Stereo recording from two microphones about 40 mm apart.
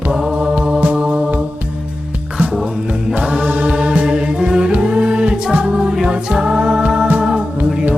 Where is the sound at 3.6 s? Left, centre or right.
Right.